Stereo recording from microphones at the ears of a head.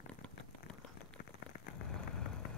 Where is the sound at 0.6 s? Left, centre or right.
Left.